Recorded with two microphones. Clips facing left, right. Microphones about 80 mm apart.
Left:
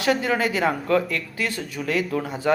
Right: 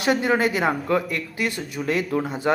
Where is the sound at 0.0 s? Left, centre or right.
Right.